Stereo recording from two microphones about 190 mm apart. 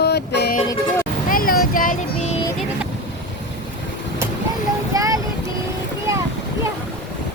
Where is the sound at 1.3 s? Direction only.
50° left (ahead or behind).